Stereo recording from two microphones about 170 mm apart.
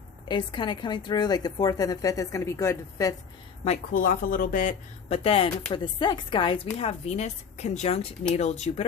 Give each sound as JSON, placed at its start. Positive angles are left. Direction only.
{"t": 0.3, "sound": "a woman's voice", "side_deg": 25}
{"t": 3.6, "sound": "speech", "side_deg": 50}
{"t": 5.0, "sound": "a woman's voice", "side_deg": 35}